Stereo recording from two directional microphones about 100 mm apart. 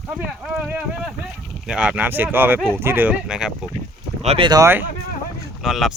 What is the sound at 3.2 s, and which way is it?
Speech, 5° right (ahead or behind).